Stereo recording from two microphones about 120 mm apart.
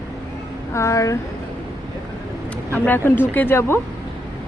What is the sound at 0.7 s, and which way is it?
Speech, 25° left (ahead or behind).